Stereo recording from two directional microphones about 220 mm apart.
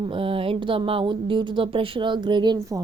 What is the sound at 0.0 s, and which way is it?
Speech, 25° right (ahead or behind).